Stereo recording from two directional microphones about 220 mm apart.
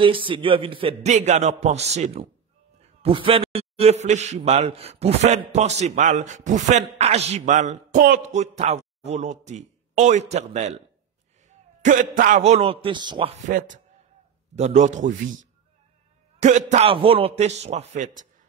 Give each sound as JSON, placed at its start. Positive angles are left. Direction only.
{"t": 0.0, "sound": "a man's voice", "side_deg": -25}
{"t": 16.3, "sound": "a man's voice", "side_deg": -30}